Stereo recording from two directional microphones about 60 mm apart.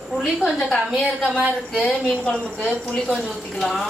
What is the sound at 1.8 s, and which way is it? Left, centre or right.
Speech, centre.